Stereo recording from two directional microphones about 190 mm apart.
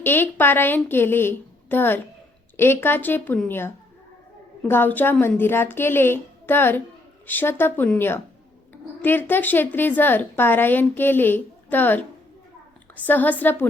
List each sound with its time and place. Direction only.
0.0 s a woman's voice: 10° left (ahead or behind)
4.7 s a woman's voice: 10° left (ahead or behind)
13.1 s a woman's voice: 10° left (ahead or behind)